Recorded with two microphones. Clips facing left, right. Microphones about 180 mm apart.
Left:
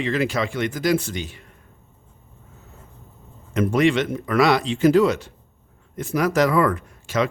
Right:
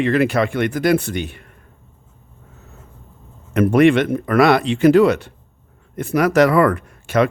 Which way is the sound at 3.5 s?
60° right (ahead or behind).